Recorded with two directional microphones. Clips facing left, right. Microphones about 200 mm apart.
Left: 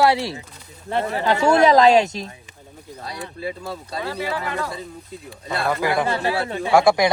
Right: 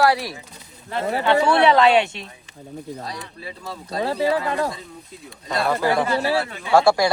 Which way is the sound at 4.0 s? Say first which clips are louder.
Right 7 dB; 30° right (ahead or behind).